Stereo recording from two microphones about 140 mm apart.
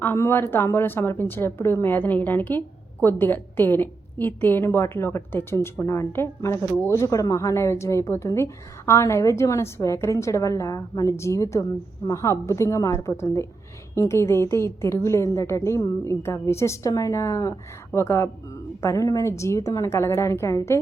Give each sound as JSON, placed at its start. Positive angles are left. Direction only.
{"t": 0.0, "sound": "a woman's voice", "side_deg": 15}